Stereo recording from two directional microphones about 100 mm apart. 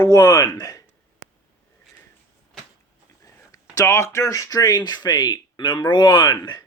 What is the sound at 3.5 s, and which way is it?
Speech, 35° left (ahead or behind).